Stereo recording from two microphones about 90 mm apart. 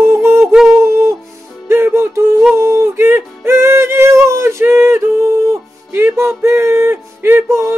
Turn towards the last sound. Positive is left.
turn(degrees=-25)  # may be behind; listen again after turning